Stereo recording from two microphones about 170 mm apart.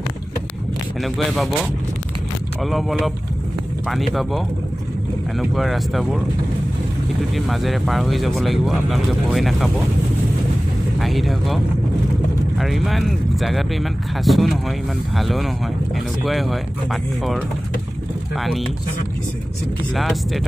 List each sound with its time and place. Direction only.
1.0 s speech: centre (ahead or behind)
2.6 s speech: centre (ahead or behind)
5.4 s speech: centre (ahead or behind)
7.3 s speech: centre (ahead or behind)
11.0 s speech: centre (ahead or behind)
20.0 s speech: centre (ahead or behind)